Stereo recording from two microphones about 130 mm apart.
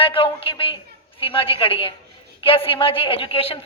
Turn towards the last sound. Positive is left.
turn(degrees=45)  # may be behind; listen again after turning